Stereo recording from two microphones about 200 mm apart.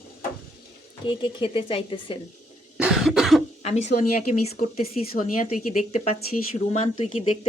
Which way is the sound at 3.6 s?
35° left (ahead or behind).